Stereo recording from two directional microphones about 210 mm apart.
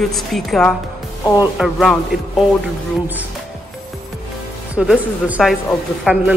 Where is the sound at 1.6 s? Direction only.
Centre (ahead or behind).